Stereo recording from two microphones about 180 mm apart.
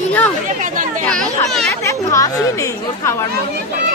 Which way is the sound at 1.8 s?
15° left (ahead or behind).